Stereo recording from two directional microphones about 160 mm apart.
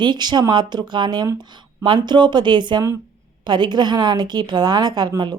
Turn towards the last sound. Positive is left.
turn(degrees=-30)  # may be behind; listen again after turning